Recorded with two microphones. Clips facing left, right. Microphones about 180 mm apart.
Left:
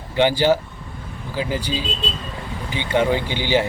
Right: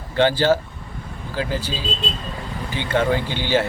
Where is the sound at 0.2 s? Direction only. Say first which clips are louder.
Even; 15° left (ahead or behind).